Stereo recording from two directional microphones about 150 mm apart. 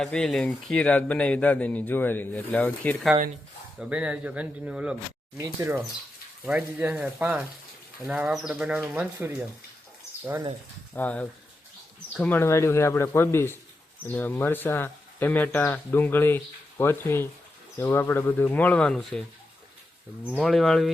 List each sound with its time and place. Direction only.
0.0 s speech: 5° left (ahead or behind)
3.8 s speech: 10° right (ahead or behind)
5.4 s speech: 15° right (ahead or behind)
10.9 s speech: 10° left (ahead or behind)
20.3 s speech: centre (ahead or behind)